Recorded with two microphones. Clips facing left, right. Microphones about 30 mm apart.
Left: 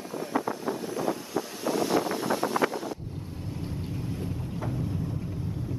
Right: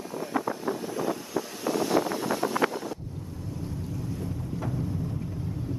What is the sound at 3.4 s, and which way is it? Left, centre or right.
Vehicle, left.